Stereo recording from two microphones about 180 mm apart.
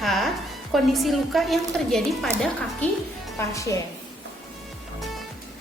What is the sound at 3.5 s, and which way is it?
Speech, 20° left (ahead or behind).